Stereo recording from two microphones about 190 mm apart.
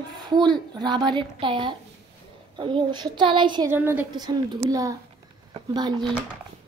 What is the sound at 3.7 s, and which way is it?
Speech, 10° right (ahead or behind).